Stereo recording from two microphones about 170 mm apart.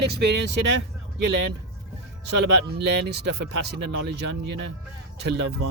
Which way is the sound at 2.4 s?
90° right.